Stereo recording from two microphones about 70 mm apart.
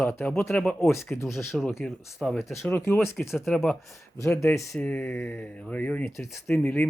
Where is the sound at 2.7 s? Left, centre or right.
Left.